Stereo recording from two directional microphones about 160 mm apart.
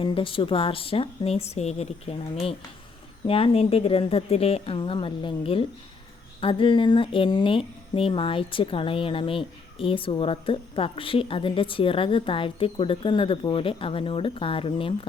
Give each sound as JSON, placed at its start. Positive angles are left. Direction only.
{"t": 0.0, "sound": "speech", "side_deg": 35}